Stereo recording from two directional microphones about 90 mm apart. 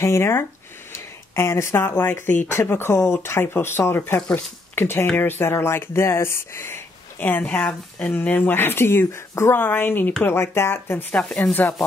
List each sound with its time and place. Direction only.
0.0 s speech: 30° left (ahead or behind)